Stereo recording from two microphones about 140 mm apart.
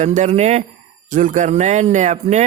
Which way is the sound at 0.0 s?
55° right (ahead or behind).